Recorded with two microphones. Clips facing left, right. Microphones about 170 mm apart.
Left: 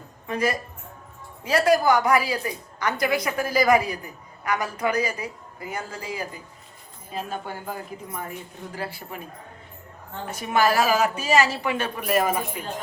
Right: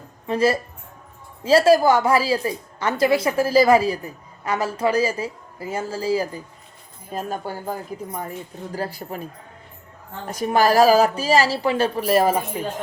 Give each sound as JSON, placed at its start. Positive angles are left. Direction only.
{"t": 0.3, "sound": "a woman's voice", "side_deg": -30}
{"t": 10.2, "sound": "a woman's voice", "side_deg": -35}